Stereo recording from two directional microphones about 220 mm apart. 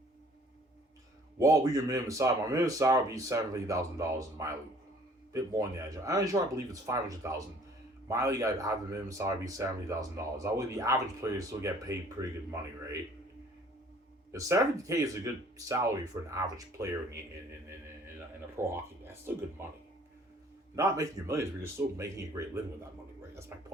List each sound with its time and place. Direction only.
1.4 s speech: 15° right (ahead or behind)
14.3 s speech: 15° right (ahead or behind)
18.5 s speech: 10° right (ahead or behind)
20.7 s speech: 15° right (ahead or behind)